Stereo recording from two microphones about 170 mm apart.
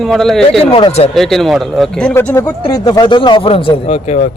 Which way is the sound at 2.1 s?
15° left (ahead or behind).